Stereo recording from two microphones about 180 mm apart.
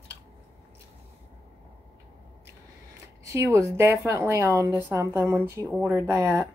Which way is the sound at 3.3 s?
15° right (ahead or behind).